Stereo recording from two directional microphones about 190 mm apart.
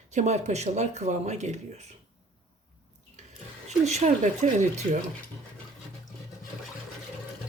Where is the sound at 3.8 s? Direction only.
35° right (ahead or behind).